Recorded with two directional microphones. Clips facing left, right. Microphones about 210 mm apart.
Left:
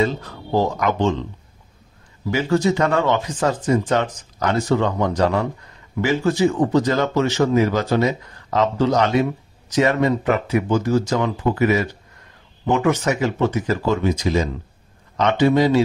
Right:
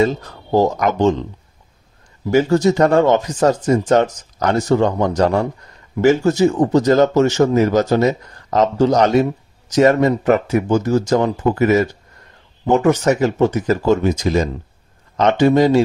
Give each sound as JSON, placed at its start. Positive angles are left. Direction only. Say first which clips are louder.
{"t": 0.0, "sound": "speech", "louder": "right 4 dB", "side_deg": -45}
{"t": 2.3, "sound": "speech", "louder": "right 5 dB", "side_deg": -40}